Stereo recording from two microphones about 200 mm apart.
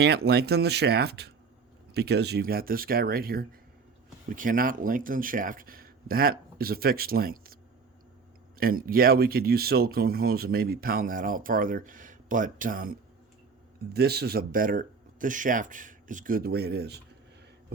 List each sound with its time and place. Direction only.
0.0 s speech: 55° right (ahead or behind)